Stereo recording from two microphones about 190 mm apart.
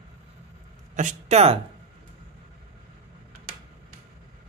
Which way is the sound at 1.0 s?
40° right (ahead or behind).